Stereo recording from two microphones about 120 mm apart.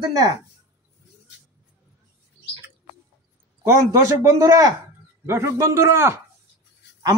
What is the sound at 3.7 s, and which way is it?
A man's voice, 25° right (ahead or behind).